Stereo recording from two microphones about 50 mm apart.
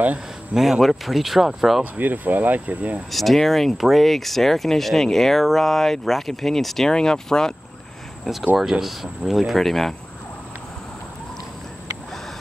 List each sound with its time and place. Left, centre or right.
0.6 s speech: centre
2.0 s speech: right
3.1 s speech: centre
8.5 s speech: centre